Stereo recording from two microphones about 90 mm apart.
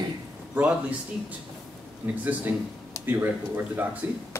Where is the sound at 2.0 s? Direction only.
20° right (ahead or behind).